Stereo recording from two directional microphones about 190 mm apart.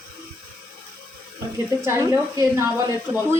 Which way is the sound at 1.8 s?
15° right (ahead or behind).